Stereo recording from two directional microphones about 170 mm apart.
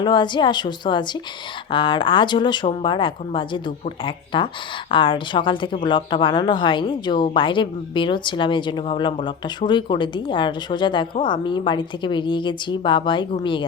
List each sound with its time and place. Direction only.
0.0 s speech: 25° left (ahead or behind)